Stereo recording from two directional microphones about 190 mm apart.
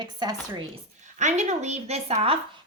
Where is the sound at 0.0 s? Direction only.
20° right (ahead or behind).